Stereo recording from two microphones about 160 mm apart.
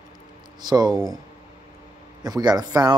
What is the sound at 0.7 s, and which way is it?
Speech, 25° right (ahead or behind).